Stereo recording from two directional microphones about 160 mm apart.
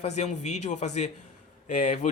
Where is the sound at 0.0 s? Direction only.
45° left (ahead or behind).